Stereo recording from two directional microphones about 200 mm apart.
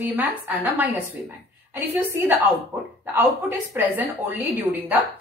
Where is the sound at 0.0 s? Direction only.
10° right (ahead or behind).